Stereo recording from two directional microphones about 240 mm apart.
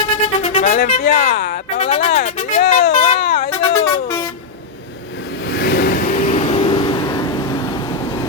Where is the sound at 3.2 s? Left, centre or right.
Left.